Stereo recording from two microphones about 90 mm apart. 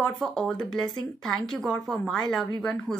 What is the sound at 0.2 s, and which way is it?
Speech, 5° left (ahead or behind).